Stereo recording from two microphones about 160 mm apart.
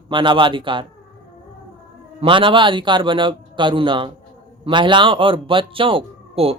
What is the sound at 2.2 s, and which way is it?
Speech, 35° right (ahead or behind).